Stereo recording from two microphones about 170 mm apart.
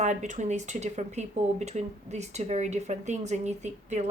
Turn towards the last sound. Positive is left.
turn(degrees=-40)  # may be behind; listen again after turning